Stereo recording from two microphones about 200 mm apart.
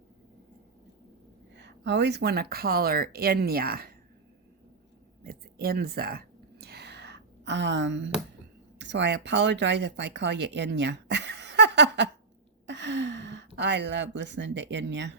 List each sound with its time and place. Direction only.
1.5 s speech: 60° right (ahead or behind)
5.2 s a sound: 50° right (ahead or behind); by 8.1 s 65° right (ahead or behind)
8.8 s speech: 60° right (ahead or behind)